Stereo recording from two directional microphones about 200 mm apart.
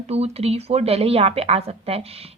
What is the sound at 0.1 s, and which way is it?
A woman's voice, 30° right (ahead or behind).